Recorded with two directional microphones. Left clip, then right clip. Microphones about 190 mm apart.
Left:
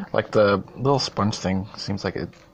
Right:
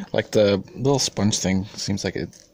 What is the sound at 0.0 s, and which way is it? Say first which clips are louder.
Speech: even; 55° right (ahead or behind).